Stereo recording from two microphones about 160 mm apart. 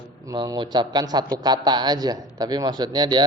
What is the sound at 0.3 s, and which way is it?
A man's voice, 25° right (ahead or behind).